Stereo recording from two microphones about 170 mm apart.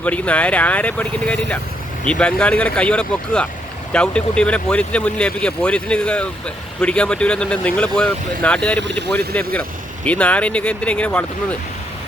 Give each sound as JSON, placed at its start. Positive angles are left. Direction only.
{"t": 0.0, "sound": "speech", "side_deg": 10}
{"t": 8.8, "sound": "speech", "side_deg": -90}
{"t": 9.1, "sound": "speech", "side_deg": 10}